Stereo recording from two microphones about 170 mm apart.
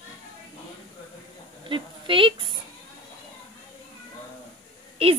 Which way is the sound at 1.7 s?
30° right (ahead or behind).